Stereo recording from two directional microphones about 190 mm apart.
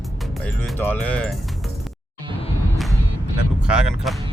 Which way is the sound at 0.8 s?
10° left (ahead or behind).